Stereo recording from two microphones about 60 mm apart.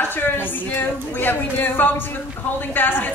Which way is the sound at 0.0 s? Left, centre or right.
Left.